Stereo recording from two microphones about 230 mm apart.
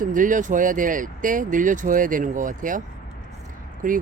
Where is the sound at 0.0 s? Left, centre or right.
Right.